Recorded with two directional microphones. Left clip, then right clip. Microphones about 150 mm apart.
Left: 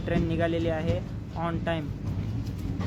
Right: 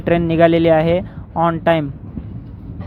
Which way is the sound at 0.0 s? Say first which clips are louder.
Right 15 dB; 55° right (ahead or behind).